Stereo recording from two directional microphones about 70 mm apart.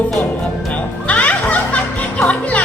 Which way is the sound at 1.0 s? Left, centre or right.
Centre.